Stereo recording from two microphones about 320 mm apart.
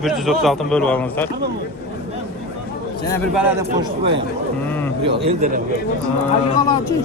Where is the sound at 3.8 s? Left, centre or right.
Centre.